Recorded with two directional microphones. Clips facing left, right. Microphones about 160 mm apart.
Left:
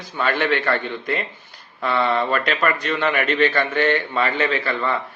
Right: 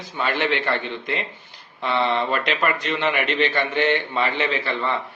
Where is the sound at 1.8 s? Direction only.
20° right (ahead or behind).